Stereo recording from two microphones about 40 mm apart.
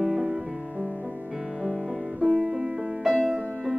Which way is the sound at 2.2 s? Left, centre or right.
Centre.